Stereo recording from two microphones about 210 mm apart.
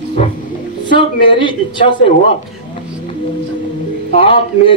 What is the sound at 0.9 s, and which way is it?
Speech, 25° left (ahead or behind).